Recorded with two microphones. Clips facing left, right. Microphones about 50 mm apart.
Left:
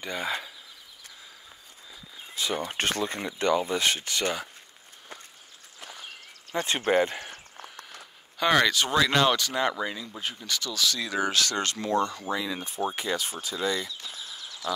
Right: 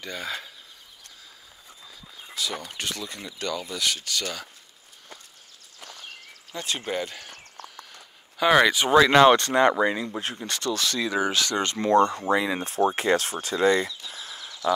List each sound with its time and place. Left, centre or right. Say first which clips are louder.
0.0 s speech: left 2 dB; centre
2.3 s speech: left 3 dB; left
5.8 s a sound: even; centre
6.5 s speech: left 3 dB; left
6.9 s a sound: left 6 dB; left
7.7 s a sound: left 1 dB; centre
8.5 s speech: right 6 dB; centre
9.4 s speech: right 7 dB; right
10.0 s speech: right 4 dB; right
10.4 s speech: right 1 dB; right
11.0 s speech: right 3 dB; centre
11.9 s speech: right 8 dB; right
12.5 s speech: right 7 dB; right